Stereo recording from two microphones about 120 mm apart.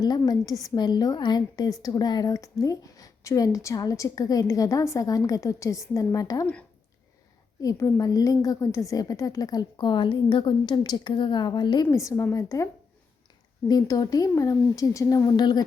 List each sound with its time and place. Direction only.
0.0 s a woman's voice: 35° left (ahead or behind)
7.6 s a woman's voice: 30° left (ahead or behind)
13.7 s a woman's voice: 30° left (ahead or behind)